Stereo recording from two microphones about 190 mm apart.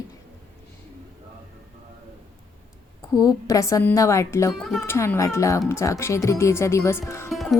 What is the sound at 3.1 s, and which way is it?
Speech, 15° left (ahead or behind).